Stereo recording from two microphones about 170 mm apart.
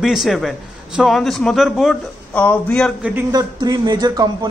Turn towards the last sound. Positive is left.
turn(degrees=-25)  # may be behind; listen again after turning